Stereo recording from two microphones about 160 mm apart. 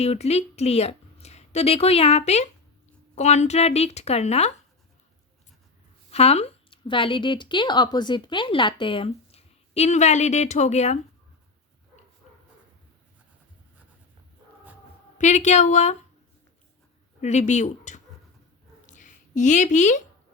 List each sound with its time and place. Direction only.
0.0 s a woman's voice: 40° left (ahead or behind)
6.1 s a woman's voice: 40° left (ahead or behind)
15.2 s a woman's voice: 50° left (ahead or behind)
17.2 s a woman's voice: 45° left (ahead or behind)
18.9 s a sound: 50° left (ahead or behind)